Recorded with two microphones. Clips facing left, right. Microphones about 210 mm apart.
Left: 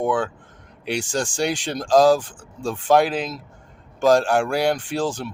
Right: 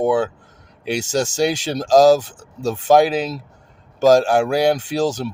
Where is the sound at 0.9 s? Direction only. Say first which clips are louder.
Right 4 dB; 40° right (ahead or behind).